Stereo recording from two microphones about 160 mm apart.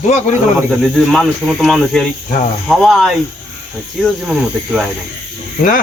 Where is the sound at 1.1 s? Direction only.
Centre (ahead or behind).